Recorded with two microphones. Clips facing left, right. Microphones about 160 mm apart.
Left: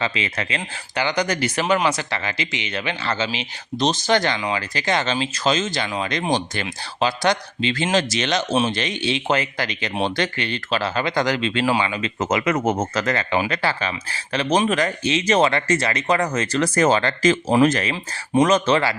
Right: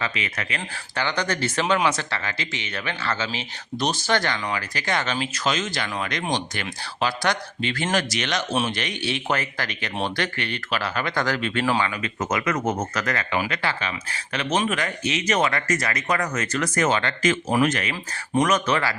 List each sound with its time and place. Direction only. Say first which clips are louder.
0.0 s speech: left 4 dB; 25° left (ahead or behind)
0.9 s speech: left 4 dB; 15° left (ahead or behind)